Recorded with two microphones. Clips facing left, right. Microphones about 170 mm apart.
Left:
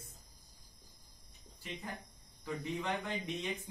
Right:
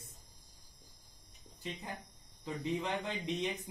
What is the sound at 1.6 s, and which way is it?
Speech, 20° right (ahead or behind).